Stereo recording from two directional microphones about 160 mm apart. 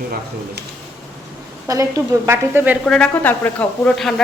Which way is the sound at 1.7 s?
20° right (ahead or behind).